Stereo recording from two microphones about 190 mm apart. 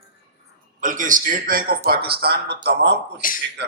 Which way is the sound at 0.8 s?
45° right (ahead or behind).